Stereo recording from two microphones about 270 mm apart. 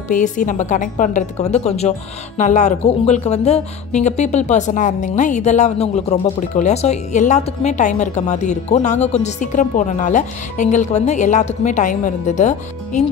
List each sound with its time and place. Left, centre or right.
0.1 s a woman's voice: left